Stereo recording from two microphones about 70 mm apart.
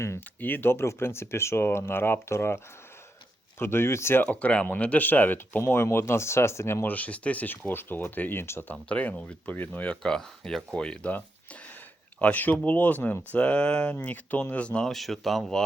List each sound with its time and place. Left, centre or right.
0.3 s speech: left
3.6 s speech: left
4.2 s speech: left
6.8 s speech: left
8.7 s speech: centre
10.0 s speech: centre
12.2 s speech: left
14.8 s speech: centre